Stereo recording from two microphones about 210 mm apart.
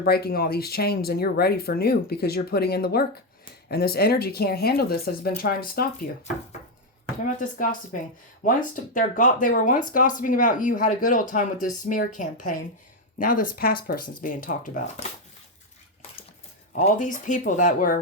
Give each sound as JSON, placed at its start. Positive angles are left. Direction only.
{"t": 0.0, "sound": "speech", "side_deg": 45}
{"t": 7.9, "sound": "speech", "side_deg": 40}
{"t": 16.7, "sound": "speech", "side_deg": 35}